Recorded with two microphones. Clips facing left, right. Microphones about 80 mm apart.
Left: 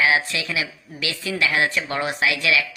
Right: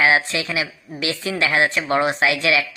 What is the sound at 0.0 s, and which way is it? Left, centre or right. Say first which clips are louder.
A woman's voice: right 3 dB; right.